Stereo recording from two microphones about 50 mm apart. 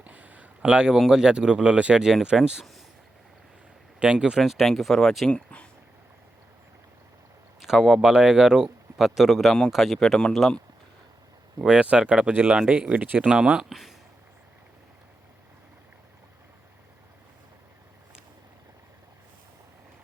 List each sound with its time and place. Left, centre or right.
0.0 s a sound: right
0.6 s speech: centre
0.9 s speech: centre
1.2 s speech: centre
4.0 s speech: centre
4.4 s speech: centre
5.3 s speech: left
7.6 s speech: centre
11.6 s speech: centre
12.3 s speech: right
12.5 s speech: centre